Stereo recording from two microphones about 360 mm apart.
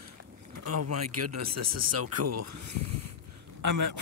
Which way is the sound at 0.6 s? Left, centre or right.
Right.